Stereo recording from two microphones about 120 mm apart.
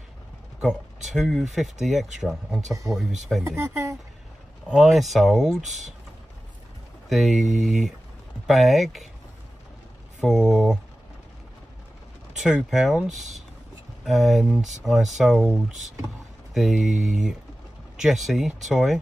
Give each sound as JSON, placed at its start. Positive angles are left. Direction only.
{"t": 0.6, "sound": "speech", "side_deg": -5}
{"t": 3.4, "sound": "speech", "side_deg": -20}
{"t": 4.6, "sound": "speech", "side_deg": -5}
{"t": 7.1, "sound": "speech", "side_deg": 0}
{"t": 10.2, "sound": "speech", "side_deg": -5}
{"t": 12.4, "sound": "speech", "side_deg": -5}